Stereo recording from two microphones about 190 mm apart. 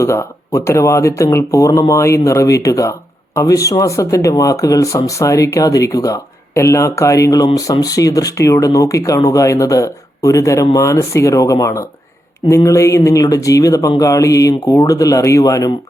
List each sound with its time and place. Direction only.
0.0 s speech: 15° left (ahead or behind)